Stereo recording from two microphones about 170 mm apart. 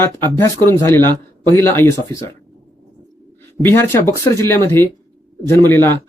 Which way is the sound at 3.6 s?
15° left (ahead or behind).